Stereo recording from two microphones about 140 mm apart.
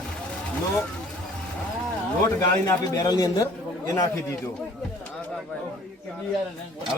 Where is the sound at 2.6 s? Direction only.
25° left (ahead or behind).